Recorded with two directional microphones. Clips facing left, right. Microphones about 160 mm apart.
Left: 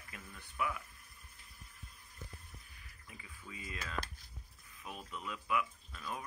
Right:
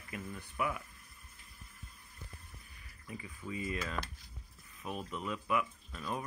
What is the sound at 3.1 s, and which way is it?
Speech, 40° right (ahead or behind).